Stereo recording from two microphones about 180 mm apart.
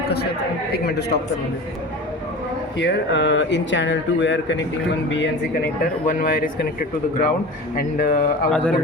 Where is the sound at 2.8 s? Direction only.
90° left.